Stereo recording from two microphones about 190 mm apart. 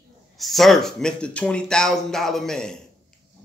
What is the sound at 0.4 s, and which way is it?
Speech, centre (ahead or behind).